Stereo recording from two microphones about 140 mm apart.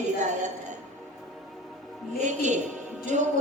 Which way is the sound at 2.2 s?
60° right (ahead or behind).